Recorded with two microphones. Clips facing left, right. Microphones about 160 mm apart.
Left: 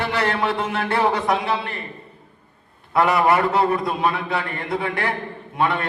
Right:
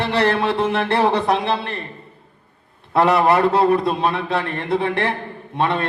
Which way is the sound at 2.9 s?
30° right (ahead or behind).